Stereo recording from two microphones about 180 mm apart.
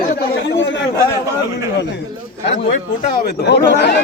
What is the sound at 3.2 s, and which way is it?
Speech, 70° left (ahead or behind).